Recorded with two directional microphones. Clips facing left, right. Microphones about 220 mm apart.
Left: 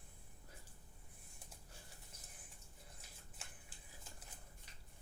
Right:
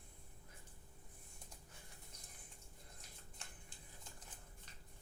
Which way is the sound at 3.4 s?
5° left (ahead or behind).